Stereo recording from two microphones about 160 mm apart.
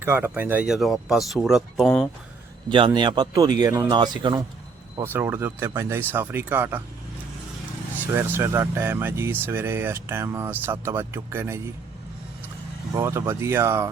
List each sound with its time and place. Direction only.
0.0 s speech: 15° right (ahead or behind)
2.6 s speech: 30° right (ahead or behind)
5.0 s speech: 15° right (ahead or behind)
8.1 s speech: 15° right (ahead or behind)
12.9 s speech: 15° right (ahead or behind)